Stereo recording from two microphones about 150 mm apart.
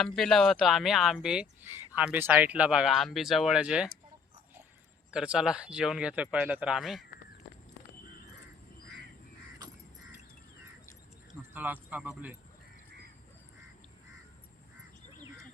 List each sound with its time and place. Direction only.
0.0 s speech: centre (ahead or behind)
5.1 s speech: 5° right (ahead or behind)
9.6 s crow: 25° right (ahead or behind)
11.5 s speech: 10° right (ahead or behind)